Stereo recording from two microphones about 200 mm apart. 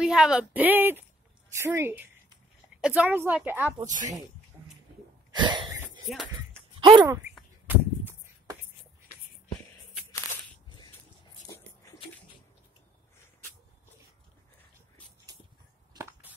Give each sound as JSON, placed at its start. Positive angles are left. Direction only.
{"t": 0.0, "sound": "a woman's voice", "side_deg": -5}
{"t": 3.8, "sound": "speech", "side_deg": -40}
{"t": 5.3, "sound": "a sound", "side_deg": -20}
{"t": 6.1, "sound": "speech", "side_deg": 0}
{"t": 6.8, "sound": "speech", "side_deg": -20}
{"t": 7.6, "sound": "a sound", "side_deg": -10}
{"t": 15.9, "sound": "chop", "side_deg": -15}